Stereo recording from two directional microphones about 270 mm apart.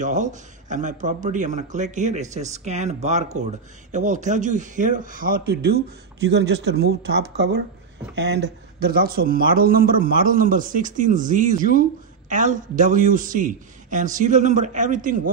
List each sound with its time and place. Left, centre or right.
0.0 s a man's voice: right